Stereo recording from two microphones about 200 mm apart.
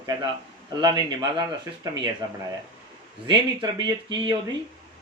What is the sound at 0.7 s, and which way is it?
Speech, 20° right (ahead or behind).